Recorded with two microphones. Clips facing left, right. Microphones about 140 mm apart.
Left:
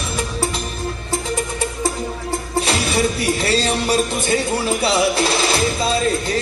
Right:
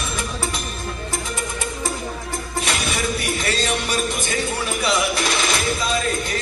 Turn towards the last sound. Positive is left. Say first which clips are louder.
# left 4 dB
turn(degrees=30)  # may be behind; listen again after turning